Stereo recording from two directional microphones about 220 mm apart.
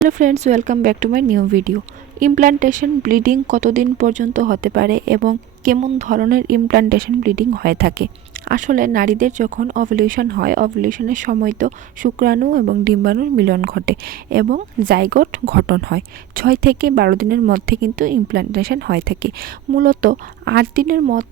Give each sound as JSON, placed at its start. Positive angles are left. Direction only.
{"t": 0.2, "sound": "a woman's voice", "side_deg": -35}